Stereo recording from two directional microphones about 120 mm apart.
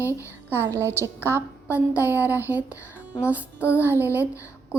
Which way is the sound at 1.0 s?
20° left (ahead or behind).